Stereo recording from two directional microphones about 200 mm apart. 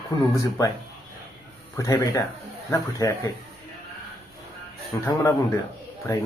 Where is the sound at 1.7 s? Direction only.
15° left (ahead or behind).